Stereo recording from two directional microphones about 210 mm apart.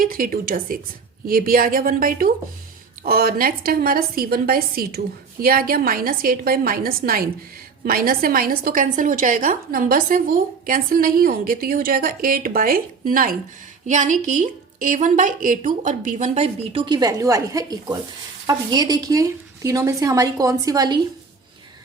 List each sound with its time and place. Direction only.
0.0 s a woman's voice: 45° right (ahead or behind); by 21.1 s 20° right (ahead or behind)